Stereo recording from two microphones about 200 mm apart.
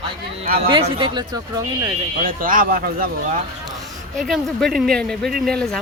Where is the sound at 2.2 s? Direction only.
45° right (ahead or behind).